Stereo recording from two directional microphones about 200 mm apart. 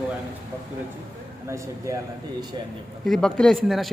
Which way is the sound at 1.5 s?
15° right (ahead or behind).